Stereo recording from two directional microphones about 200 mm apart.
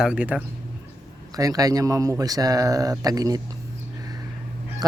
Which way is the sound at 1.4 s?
20° right (ahead or behind).